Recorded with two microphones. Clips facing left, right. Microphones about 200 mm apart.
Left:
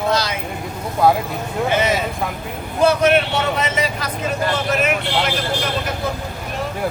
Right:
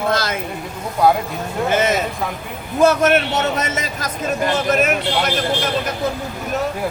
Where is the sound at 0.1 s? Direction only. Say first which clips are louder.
Left 1 dB; 50° right (ahead or behind).